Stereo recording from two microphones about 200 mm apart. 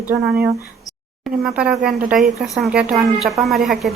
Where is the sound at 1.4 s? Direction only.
5° right (ahead or behind).